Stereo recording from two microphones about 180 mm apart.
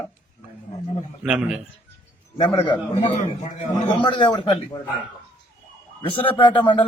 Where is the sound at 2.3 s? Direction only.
30° left (ahead or behind).